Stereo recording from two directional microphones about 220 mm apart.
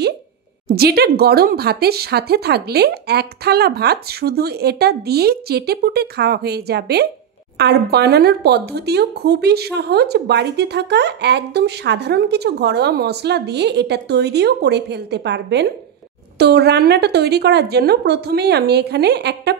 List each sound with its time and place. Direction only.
0.7 s speech: 45° right (ahead or behind)